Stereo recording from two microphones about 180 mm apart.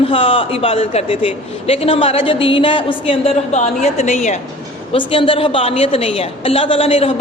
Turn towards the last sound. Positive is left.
turn(degrees=35)  # may be behind; listen again after turning